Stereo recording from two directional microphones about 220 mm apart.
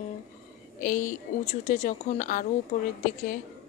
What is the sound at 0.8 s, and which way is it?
A woman's voice, 40° left (ahead or behind).